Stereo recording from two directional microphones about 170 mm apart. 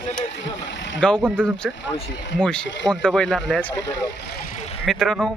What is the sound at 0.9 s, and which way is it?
Speech, 5° left (ahead or behind).